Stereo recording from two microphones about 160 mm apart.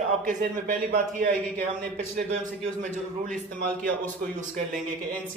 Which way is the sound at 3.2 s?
10° left (ahead or behind).